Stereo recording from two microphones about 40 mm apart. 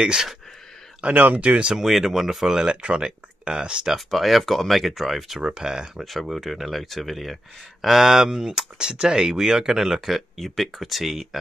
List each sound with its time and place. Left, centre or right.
0.0 s speech: centre
1.0 s speech: right
1.5 s speech: right
1.8 s speech: centre
2.7 s speech: right
4.1 s speech: centre
5.4 s speech: centre
6.0 s speech: centre